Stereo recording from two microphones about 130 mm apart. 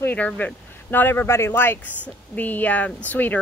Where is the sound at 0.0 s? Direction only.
10° left (ahead or behind).